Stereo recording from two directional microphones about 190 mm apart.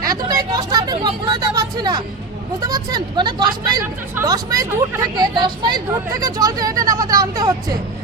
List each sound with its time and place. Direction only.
0.0 s speech: 20° right (ahead or behind)